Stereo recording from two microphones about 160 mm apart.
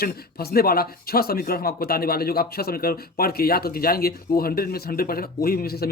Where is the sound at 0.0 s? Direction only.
75° left (ahead or behind).